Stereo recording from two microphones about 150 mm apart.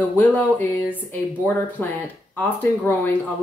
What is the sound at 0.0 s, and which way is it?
Speech, 10° left (ahead or behind).